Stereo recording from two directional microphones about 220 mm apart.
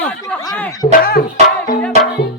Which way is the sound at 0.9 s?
45° left (ahead or behind).